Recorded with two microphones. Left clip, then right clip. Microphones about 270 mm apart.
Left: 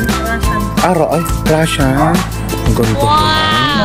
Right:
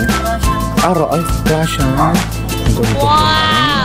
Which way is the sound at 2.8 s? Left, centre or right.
Centre.